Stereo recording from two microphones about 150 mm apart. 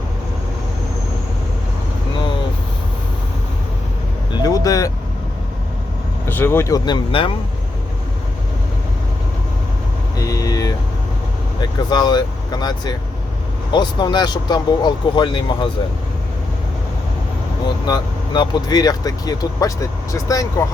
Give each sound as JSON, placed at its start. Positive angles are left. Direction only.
{"t": 4.4, "sound": "vehicle", "side_deg": 25}
{"t": 6.2, "sound": "speech", "side_deg": 15}
{"t": 10.2, "sound": "vehicle", "side_deg": 25}
{"t": 11.6, "sound": "speech", "side_deg": 30}
{"t": 17.8, "sound": "speech", "side_deg": 30}